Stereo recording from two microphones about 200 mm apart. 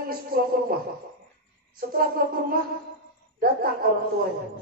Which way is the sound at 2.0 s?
50° right (ahead or behind).